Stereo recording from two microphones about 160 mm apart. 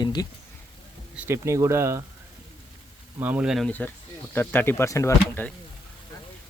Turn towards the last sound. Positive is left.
turn(degrees=20)  # may be behind; listen again after turning